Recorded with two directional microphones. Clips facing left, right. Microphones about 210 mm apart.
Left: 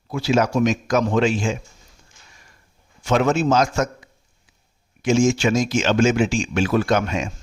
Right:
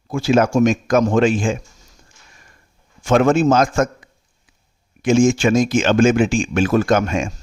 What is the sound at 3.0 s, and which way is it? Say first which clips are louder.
Speech: right 4 dB; 50° right (ahead or behind).